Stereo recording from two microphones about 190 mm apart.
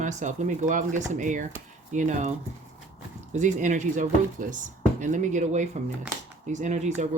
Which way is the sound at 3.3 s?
40° right (ahead or behind).